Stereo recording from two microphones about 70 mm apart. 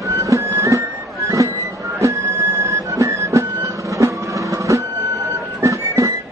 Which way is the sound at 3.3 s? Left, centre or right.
Right.